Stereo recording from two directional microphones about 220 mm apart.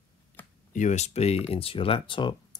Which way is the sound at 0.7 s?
35° left (ahead or behind).